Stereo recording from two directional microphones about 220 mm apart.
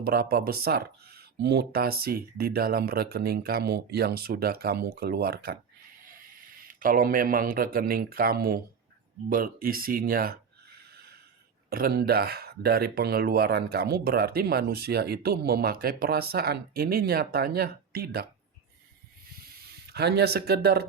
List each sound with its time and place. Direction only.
0.0 s a man's voice: 45° right (ahead or behind)
11.7 s speech: 45° right (ahead or behind)
19.9 s speech: 50° right (ahead or behind)